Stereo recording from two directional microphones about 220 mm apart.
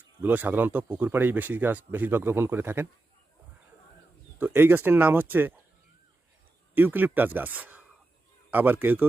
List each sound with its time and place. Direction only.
0.2 s speech: 10° right (ahead or behind)
4.4 s speech: 10° right (ahead or behind)
6.7 s speech: 10° right (ahead or behind)